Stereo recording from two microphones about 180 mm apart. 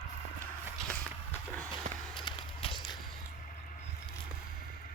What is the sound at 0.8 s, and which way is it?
Walk, 5° left (ahead or behind).